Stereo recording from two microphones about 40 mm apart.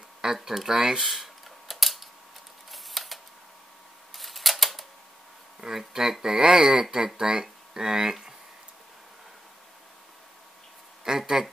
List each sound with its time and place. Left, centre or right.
0.2 s a sound: centre
4.1 s camera: centre
5.6 s speech: centre
11.1 s speech: centre